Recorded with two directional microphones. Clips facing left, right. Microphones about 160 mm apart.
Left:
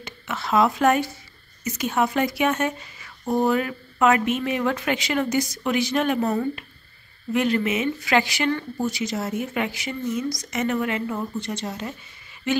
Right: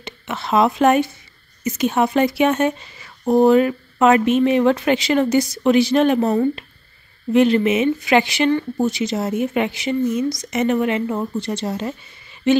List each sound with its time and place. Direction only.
0.0 s a woman's voice: 25° right (ahead or behind)